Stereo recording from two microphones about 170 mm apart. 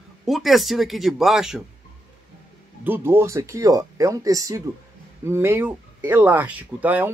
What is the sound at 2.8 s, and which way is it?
Speech, 10° right (ahead or behind).